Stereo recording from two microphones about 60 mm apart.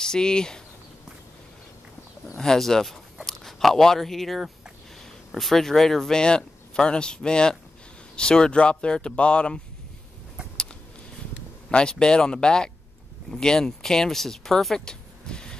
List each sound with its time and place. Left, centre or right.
0.0 s speech: centre
2.3 s speech: centre
11.7 s speech: centre